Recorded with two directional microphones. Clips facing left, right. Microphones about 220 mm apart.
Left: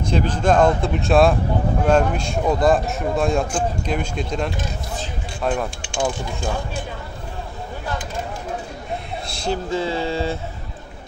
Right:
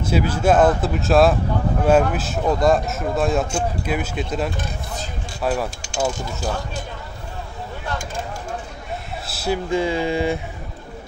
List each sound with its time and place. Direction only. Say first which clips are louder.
0.0 s a man's voice: right 1 dB; 10° right (ahead or behind)
9.3 s speech: right 2 dB; 5° right (ahead or behind)